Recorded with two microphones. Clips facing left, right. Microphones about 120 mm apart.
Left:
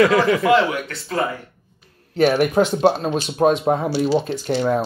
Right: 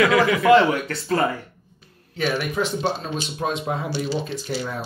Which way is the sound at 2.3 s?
60° left (ahead or behind).